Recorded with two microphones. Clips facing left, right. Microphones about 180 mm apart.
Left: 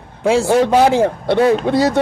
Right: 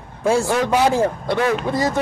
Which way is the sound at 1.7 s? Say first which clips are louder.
Left 6 dB; 75° left (ahead or behind).